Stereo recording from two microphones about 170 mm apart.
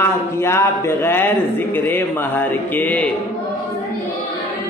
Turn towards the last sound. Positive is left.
turn(degrees=10)  # may be behind; listen again after turning